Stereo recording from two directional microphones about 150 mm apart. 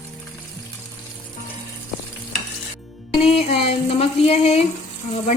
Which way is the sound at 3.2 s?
40° left (ahead or behind).